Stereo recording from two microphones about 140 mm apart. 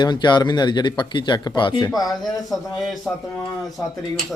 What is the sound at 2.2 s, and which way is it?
A man's voice, centre (ahead or behind).